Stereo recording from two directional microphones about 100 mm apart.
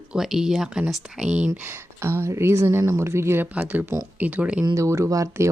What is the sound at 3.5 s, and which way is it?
A woman's voice, 15° right (ahead or behind).